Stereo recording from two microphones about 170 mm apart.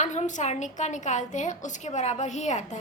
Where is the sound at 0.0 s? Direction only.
45° left (ahead or behind).